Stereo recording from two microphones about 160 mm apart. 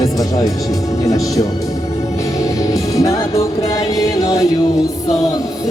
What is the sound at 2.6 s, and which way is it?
Music, 20° left (ahead or behind).